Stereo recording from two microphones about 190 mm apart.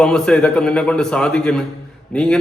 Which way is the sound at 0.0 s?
5° left (ahead or behind).